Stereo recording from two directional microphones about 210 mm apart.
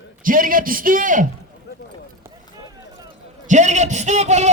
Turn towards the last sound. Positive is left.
turn(degrees=-35)  # may be behind; listen again after turning